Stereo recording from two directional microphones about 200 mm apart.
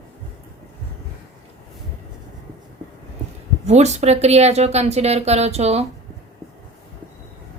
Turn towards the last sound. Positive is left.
turn(degrees=-30)  # may be behind; listen again after turning